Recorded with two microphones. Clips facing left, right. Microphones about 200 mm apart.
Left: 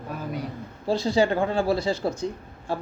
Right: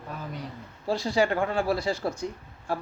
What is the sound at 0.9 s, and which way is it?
Speech, 25° left (ahead or behind).